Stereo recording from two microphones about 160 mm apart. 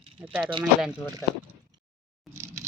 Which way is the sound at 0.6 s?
5° right (ahead or behind).